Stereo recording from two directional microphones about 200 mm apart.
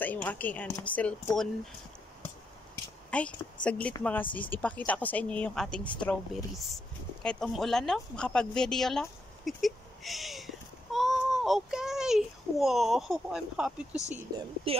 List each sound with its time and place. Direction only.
0.0 s speech: 10° left (ahead or behind)
3.1 s a child's voice: 5° left (ahead or behind)
14.3 s speech: 20° right (ahead or behind)